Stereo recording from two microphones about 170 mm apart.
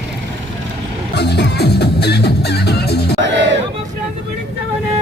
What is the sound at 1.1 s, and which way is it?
Music, 85° left.